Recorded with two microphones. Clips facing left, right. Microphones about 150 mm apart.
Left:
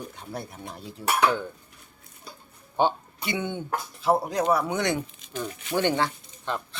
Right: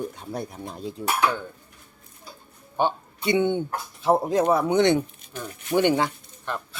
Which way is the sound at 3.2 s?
20° right (ahead or behind).